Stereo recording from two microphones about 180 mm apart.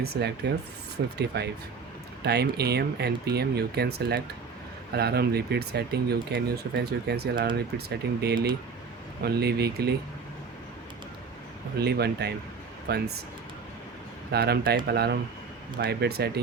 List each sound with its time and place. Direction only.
0.0 s speech: 65° right (ahead or behind)
11.8 s speech: 65° right (ahead or behind)
14.3 s speech: 65° right (ahead or behind)